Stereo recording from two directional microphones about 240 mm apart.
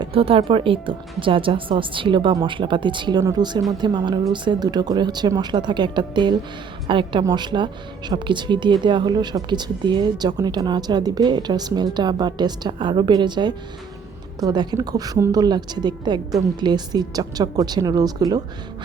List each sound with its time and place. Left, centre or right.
0.0 s speech: right